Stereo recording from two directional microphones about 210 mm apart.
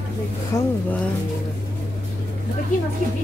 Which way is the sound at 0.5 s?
15° left (ahead or behind).